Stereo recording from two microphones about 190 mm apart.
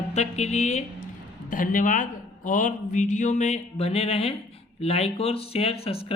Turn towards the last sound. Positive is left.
turn(degrees=30)  # may be behind; listen again after turning